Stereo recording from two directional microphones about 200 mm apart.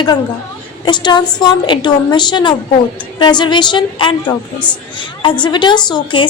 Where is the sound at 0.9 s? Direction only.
20° left (ahead or behind).